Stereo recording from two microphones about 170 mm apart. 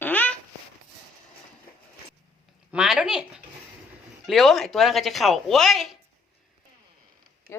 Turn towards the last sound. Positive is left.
turn(degrees=0)  # may be behind; listen again after turning